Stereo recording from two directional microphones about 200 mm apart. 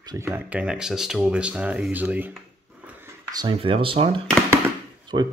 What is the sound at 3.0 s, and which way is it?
Speech, 20° right (ahead or behind).